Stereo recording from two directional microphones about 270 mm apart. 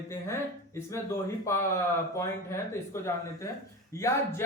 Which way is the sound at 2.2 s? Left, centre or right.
Centre.